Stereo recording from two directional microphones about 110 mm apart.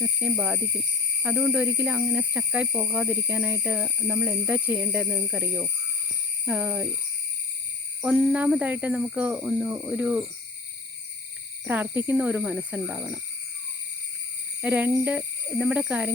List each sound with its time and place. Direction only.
0.0 s speech: 10° right (ahead or behind)
8.0 s speech: 10° right (ahead or behind)
11.6 s speech: 15° right (ahead or behind)
14.6 s speech: 15° right (ahead or behind)